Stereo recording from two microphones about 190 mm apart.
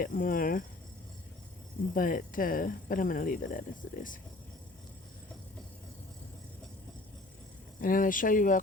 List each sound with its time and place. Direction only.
0.0 s speech: 45° left (ahead or behind)
1.9 s speech: 45° left (ahead or behind)
7.8 s speech: 45° left (ahead or behind)